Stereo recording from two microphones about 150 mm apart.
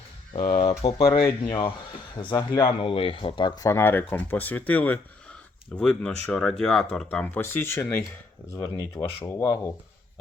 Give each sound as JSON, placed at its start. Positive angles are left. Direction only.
{"t": 0.3, "sound": "speech", "side_deg": 30}
{"t": 0.7, "sound": "speech", "side_deg": 45}